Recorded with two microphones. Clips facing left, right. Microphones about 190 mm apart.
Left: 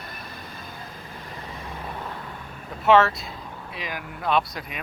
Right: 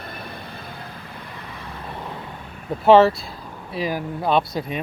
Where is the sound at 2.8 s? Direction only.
30° right (ahead or behind).